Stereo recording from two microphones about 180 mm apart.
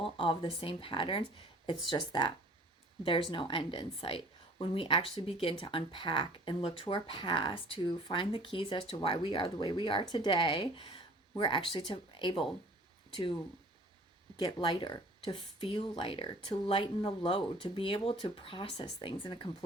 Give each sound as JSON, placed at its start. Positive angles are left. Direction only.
{"t": 0.0, "sound": "a woman's voice", "side_deg": 30}
{"t": 14.3, "sound": "a woman's voice", "side_deg": 25}